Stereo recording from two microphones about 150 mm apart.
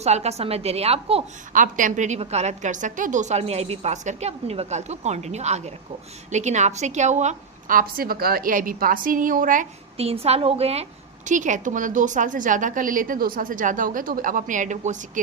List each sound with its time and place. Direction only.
0.0 s a woman's voice: 45° right (ahead or behind)
1.5 s a woman's voice: 60° right (ahead or behind)
10.0 s a woman's voice: 40° right (ahead or behind)
11.3 s a woman's voice: 55° right (ahead or behind)